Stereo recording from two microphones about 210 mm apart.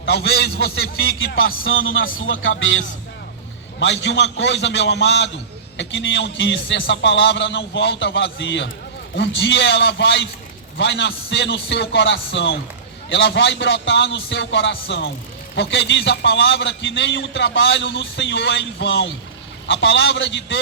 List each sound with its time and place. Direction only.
0.0 s a man's voice: 60° left (ahead or behind)
1.6 s a man's voice: 70° left (ahead or behind)